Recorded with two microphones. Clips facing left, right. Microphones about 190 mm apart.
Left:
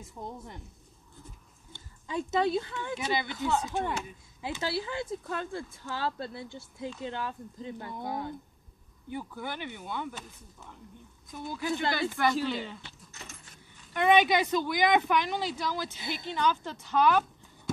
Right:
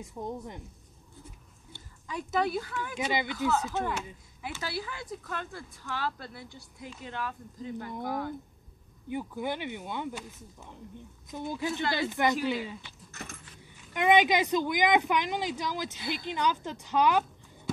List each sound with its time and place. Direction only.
2.0 s speech: 25° left (ahead or behind)
3.0 s speech: 15° right (ahead or behind)
4.5 s speech: 25° left (ahead or behind)
9.1 s speech: 20° right (ahead or behind)
13.9 s speech: 15° right (ahead or behind)
16.0 s speech: 20° left (ahead or behind)
16.3 s speech: 15° right (ahead or behind)